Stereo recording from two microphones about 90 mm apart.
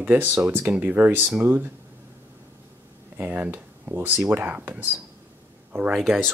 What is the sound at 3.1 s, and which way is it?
Speech, 20° right (ahead or behind).